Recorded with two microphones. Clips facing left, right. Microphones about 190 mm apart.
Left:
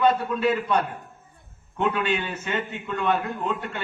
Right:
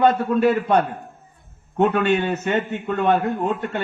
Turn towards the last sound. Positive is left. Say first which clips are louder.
# right 6 dB
turn(degrees=-45)  # may be behind; listen again after turning